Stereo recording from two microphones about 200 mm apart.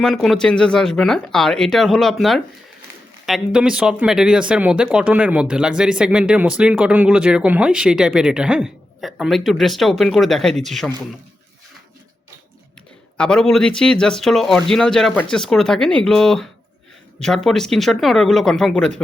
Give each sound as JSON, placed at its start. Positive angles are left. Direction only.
{"t": 0.0, "sound": "speech", "side_deg": 0}
{"t": 13.1, "sound": "speech", "side_deg": 5}